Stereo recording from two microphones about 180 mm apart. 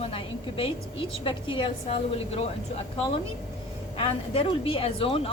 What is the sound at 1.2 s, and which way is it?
A woman's voice, 30° left (ahead or behind).